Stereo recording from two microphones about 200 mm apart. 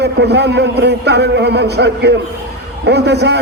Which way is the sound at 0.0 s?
55° right (ahead or behind).